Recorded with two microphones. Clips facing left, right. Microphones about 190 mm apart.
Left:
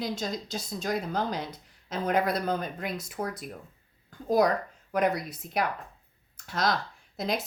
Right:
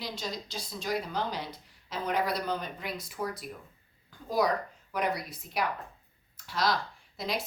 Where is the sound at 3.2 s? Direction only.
30° left (ahead or behind).